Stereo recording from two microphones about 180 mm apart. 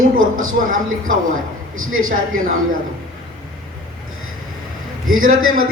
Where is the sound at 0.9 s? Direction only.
90° right.